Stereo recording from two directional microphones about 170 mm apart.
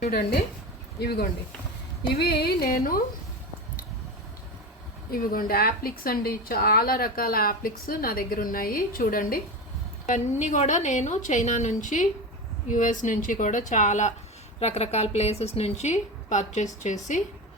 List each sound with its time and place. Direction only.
0.1 s a woman's voice: 60° left (ahead or behind)
5.1 s a woman's voice: 60° left (ahead or behind)
10.1 s a woman's voice: 50° left (ahead or behind)